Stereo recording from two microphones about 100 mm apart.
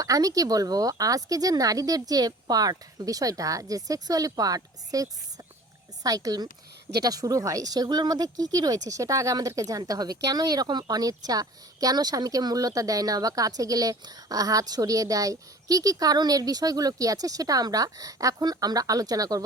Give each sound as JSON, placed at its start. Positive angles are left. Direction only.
{"t": 0.0, "sound": "speech", "side_deg": -35}